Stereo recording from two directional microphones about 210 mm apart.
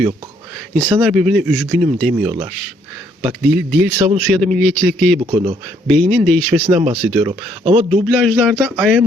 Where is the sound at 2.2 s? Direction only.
25° right (ahead or behind).